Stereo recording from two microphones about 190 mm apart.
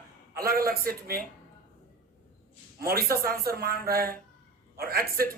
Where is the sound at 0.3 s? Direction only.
50° right (ahead or behind).